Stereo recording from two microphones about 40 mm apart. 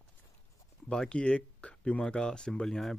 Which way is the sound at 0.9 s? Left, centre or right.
Left.